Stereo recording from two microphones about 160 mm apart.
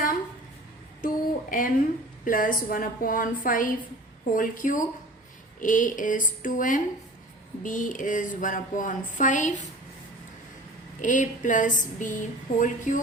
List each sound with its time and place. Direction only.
1.0 s a sound: 60° left (ahead or behind)
2.2 s a woman's voice: 60° left (ahead or behind)
11.0 s speech: 50° left (ahead or behind)